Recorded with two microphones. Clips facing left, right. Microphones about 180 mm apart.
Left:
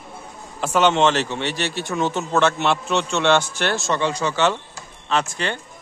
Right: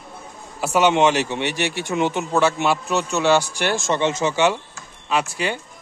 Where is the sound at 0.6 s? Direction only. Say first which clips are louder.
Right 1 dB; 10° right (ahead or behind).